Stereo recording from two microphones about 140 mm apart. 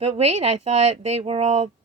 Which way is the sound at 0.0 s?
50° right (ahead or behind).